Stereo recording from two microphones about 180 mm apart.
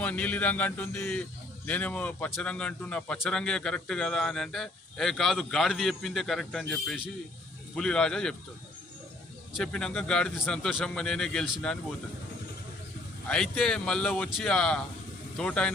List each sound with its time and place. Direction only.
0.0 s a man's voice: 10° left (ahead or behind)
9.6 s speech: 5° left (ahead or behind)
13.2 s speech: 5° left (ahead or behind)